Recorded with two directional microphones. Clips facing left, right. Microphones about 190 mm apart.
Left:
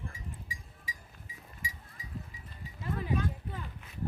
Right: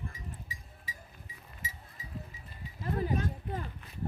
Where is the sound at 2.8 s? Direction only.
40° right (ahead or behind).